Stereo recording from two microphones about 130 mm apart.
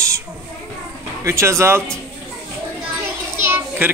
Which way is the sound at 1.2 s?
20° right (ahead or behind).